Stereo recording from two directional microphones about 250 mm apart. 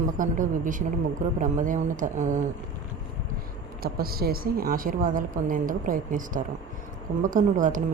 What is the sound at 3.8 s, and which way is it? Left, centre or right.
A woman's voice, right.